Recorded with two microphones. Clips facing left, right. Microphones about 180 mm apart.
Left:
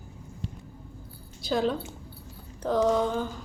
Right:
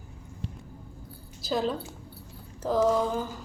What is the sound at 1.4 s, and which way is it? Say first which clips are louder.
A woman's voice: left 2 dB; centre (ahead or behind).